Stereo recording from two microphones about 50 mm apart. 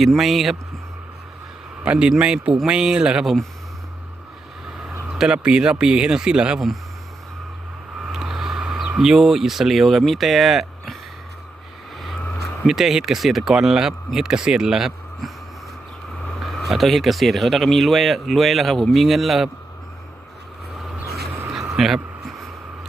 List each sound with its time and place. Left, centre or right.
0.0 s speech: centre
1.8 s a man's voice: right
5.1 s speech: centre
8.0 s vehicle: centre
9.0 s speech: centre
12.6 s speech: centre
16.6 s speech: centre
21.7 s a sound: centre